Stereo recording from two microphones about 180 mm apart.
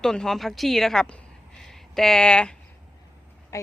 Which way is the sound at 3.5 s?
15° left (ahead or behind).